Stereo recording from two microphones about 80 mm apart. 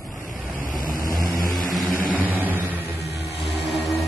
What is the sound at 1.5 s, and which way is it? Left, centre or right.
Vehicle, centre.